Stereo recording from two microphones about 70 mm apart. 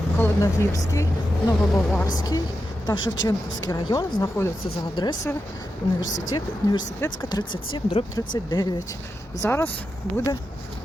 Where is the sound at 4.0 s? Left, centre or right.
Left.